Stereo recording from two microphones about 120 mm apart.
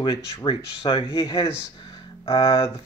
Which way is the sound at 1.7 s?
45° left (ahead or behind).